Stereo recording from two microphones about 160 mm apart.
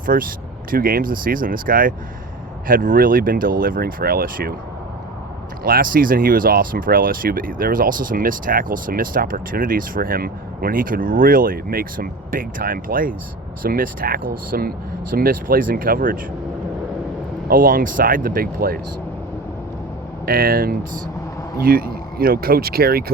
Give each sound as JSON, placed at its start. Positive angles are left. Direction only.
{"t": 0.0, "sound": "speech", "side_deg": -60}
{"t": 5.6, "sound": "speech", "side_deg": -65}
{"t": 17.5, "sound": "speech", "side_deg": -60}
{"t": 20.2, "sound": "speech", "side_deg": -65}